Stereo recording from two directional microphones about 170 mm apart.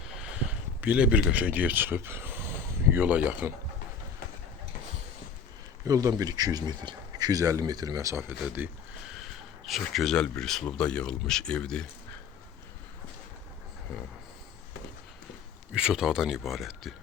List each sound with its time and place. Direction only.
0.1 s a sound: 5° right (ahead or behind)
1.3 s speech: 10° right (ahead or behind)
5.8 s speech: 20° right (ahead or behind)
8.3 s speech: 10° right (ahead or behind)
15.7 s speech: 5° right (ahead or behind)